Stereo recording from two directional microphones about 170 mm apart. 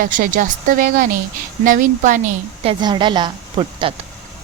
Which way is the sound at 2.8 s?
30° right (ahead or behind).